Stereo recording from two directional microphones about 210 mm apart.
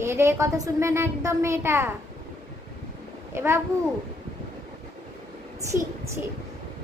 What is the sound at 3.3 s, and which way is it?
Speech, 10° right (ahead or behind).